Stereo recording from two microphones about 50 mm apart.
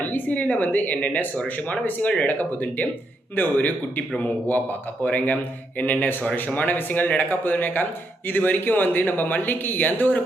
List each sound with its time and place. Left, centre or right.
0.0 s speech: left